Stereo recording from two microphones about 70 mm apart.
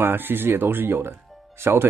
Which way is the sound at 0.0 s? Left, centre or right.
Right.